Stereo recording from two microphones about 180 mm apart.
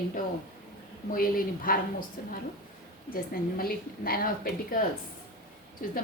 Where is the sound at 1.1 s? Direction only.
55° left (ahead or behind).